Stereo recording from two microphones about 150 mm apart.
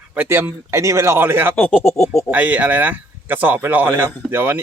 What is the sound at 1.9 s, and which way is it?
Speech, 45° left (ahead or behind).